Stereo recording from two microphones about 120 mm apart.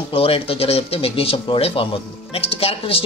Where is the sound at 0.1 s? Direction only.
50° left (ahead or behind).